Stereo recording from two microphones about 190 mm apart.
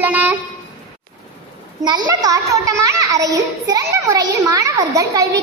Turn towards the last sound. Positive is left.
turn(degrees=-20)  # may be behind; listen again after turning